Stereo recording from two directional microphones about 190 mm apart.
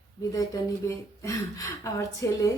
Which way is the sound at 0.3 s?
15° left (ahead or behind).